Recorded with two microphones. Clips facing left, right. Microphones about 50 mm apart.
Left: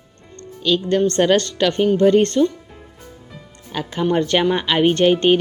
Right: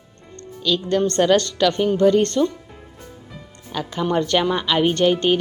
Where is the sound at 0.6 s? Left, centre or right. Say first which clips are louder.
Left 2 dB; left.